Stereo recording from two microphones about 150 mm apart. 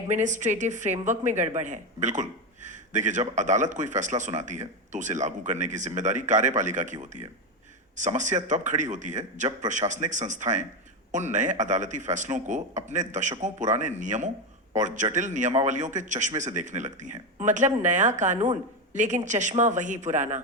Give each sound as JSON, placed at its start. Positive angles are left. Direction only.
{"t": 0.1, "sound": "speech", "side_deg": -55}